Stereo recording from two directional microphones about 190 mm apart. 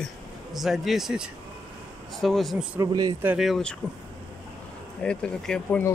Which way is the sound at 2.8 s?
20° right (ahead or behind).